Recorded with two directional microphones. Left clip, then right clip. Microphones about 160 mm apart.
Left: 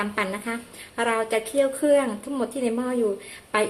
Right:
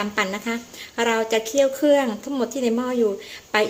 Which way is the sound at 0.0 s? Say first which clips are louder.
Right 3 dB; 20° right (ahead or behind).